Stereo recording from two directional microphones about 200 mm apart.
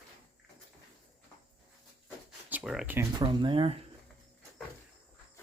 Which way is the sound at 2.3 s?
5° right (ahead or behind).